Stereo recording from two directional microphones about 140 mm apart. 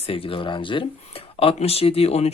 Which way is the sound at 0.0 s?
40° left (ahead or behind).